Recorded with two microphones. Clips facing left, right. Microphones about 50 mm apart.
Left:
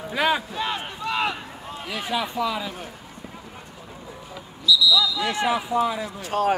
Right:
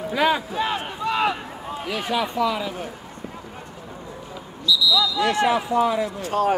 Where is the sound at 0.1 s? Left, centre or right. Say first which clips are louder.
Right 2 dB; centre.